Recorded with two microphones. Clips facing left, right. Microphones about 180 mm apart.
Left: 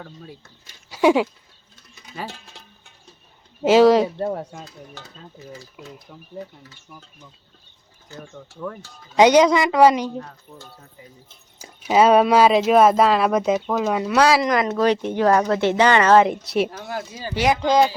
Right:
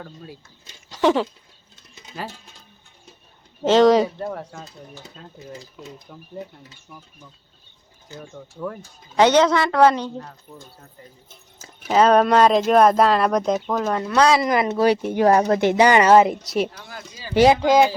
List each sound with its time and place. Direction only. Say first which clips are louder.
0.0 s speech: right 1 dB; centre (ahead or behind)
0.9 s a sound: left 2 dB; 10° left (ahead or behind)
2.3 s music: left 3 dB; 80° left
3.6 s speech: left 1 dB; 10° left (ahead or behind)
4.2 s speech: left 4 dB; 25° left (ahead or behind)
5.0 s stir: even; 75° left (ahead or behind)
6.1 s speech: right 1 dB; centre (ahead or behind)
8.3 s speech: right 2 dB; 5° right (ahead or behind)
9.1 s a woman's voice: left 2 dB; 15° left (ahead or behind)
10.5 s speech: right 1 dB; 5° right (ahead or behind)
11.9 s speech: left 1 dB; 10° left (ahead or behind); by 15.3 s 10° right (ahead or behind)
15.3 s speech: right 1 dB; 20° right (ahead or behind)
16.3 s speech: left 1 dB; centre (ahead or behind)
16.8 s speech: left 9 dB; 55° left (ahead or behind)